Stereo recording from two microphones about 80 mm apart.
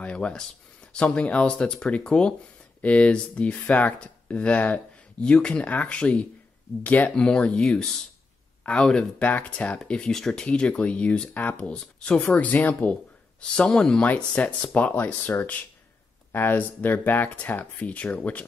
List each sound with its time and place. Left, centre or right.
0.0 s speech: centre